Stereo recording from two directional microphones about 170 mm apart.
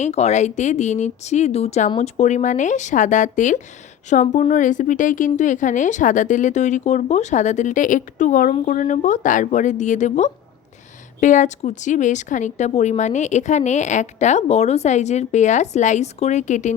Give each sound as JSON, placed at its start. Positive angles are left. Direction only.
{"t": 0.0, "sound": "speech", "side_deg": 40}